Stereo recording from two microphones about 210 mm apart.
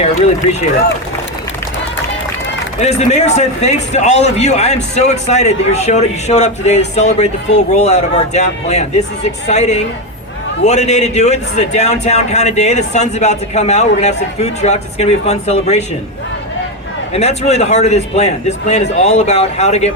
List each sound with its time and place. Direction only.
2.8 s a man's voice: 30° left (ahead or behind)
17.2 s a man's voice: 30° left (ahead or behind)